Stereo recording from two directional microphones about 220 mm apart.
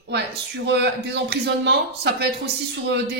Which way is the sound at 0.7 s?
50° right (ahead or behind).